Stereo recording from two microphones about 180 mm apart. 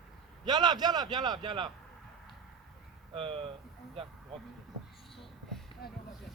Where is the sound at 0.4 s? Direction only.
25° right (ahead or behind).